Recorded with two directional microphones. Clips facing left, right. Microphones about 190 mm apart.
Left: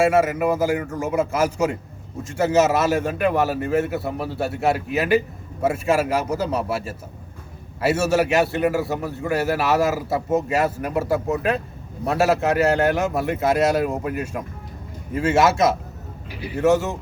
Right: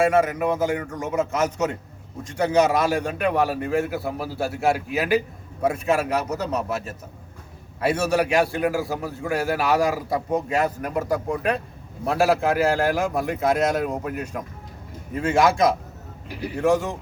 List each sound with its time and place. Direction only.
0.0 s a man's voice: 5° left (ahead or behind)